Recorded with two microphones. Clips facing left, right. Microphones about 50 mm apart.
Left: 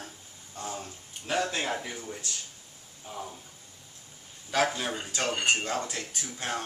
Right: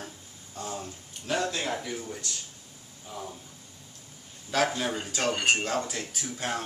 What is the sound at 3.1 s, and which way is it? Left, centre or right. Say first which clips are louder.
Speech: left 1 dB; left.